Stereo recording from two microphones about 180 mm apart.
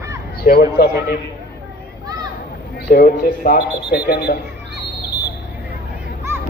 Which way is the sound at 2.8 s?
60° left (ahead or behind).